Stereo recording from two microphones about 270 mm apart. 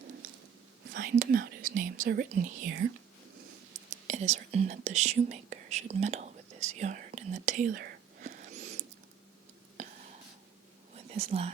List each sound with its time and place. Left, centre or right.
0.9 s speech: right
3.8 s speech: right
10.9 s whispering: right